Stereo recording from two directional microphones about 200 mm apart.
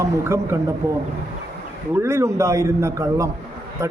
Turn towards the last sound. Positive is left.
turn(degrees=-15)  # may be behind; listen again after turning